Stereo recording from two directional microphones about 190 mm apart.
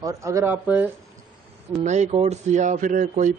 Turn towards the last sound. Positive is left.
turn(degrees=-45)  # may be behind; listen again after turning